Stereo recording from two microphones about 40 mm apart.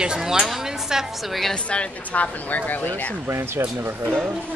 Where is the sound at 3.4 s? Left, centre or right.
Right.